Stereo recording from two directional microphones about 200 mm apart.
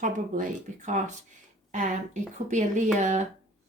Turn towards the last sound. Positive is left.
turn(degrees=-35)  # may be behind; listen again after turning